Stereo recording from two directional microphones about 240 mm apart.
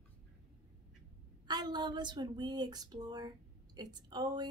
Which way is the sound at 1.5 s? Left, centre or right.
Centre.